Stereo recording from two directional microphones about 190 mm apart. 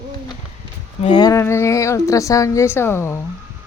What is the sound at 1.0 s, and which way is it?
Speech, 25° left (ahead or behind).